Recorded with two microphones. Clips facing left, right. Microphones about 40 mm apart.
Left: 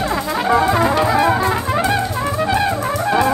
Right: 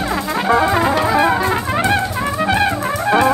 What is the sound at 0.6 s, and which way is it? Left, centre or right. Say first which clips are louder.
Brass instrument: left 1 dB; centre.